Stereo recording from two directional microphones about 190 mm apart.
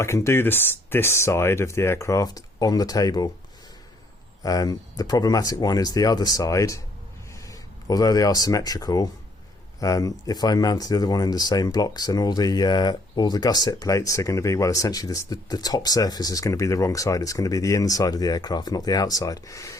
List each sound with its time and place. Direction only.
0.0 s speech: 15° left (ahead or behind)
4.4 s speech: 20° left (ahead or behind)